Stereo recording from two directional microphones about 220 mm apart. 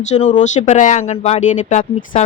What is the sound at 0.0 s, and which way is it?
A woman's voice, 30° left (ahead or behind).